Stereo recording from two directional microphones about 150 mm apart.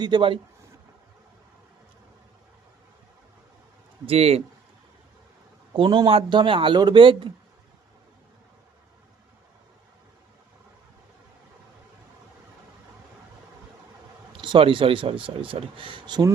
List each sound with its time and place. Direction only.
0.0 s speech: 35° right (ahead or behind)
4.0 s speech: 45° right (ahead or behind)
5.7 s speech: 35° right (ahead or behind)
14.3 s speech: 35° right (ahead or behind)